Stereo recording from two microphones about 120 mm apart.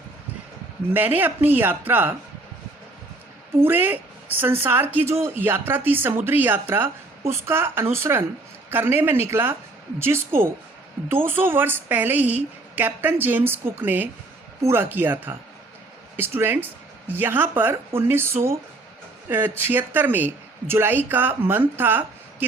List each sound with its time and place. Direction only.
0.9 s a woman's voice: 15° right (ahead or behind)
3.6 s a woman's voice: 15° right (ahead or behind)